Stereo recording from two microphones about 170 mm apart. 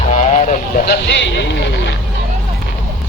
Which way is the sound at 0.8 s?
75° left (ahead or behind).